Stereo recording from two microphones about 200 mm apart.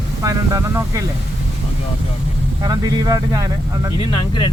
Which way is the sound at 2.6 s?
20° right (ahead or behind).